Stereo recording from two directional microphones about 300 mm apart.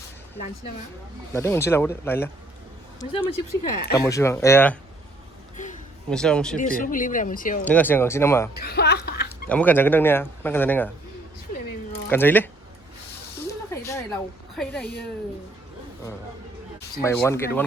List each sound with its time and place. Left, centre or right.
1.3 s speech: centre
3.3 s speech: left
3.9 s speech: centre
6.1 s speech: centre
6.6 s speech: left
7.6 s speech: centre
8.5 s music: left
9.5 s speech: centre
12.0 s speech: centre
13.5 s a sound: centre
17.0 s speech: centre